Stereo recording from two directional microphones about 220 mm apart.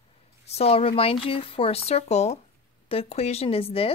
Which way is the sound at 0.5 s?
25° left (ahead or behind).